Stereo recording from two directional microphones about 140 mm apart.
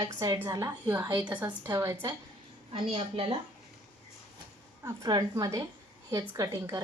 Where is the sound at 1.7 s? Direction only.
25° right (ahead or behind).